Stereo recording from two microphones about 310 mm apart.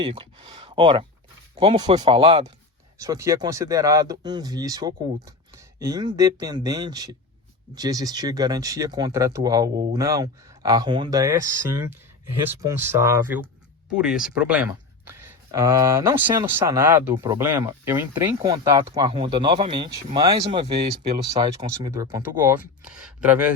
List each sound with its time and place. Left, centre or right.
0.0 s speech: centre